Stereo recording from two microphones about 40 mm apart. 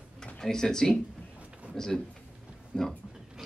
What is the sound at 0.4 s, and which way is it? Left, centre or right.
Speech, centre.